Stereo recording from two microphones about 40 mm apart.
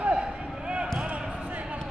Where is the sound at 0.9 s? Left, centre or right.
Right.